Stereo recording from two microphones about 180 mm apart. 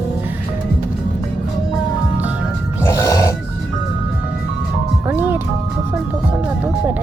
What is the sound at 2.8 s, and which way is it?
Music, 15° left (ahead or behind).